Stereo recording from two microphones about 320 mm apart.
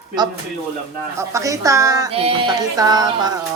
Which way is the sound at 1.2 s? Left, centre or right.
Centre.